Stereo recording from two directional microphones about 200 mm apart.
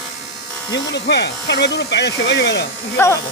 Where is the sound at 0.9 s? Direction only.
60° left (ahead or behind).